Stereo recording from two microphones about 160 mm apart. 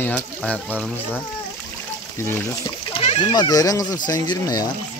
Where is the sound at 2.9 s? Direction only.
35° left (ahead or behind).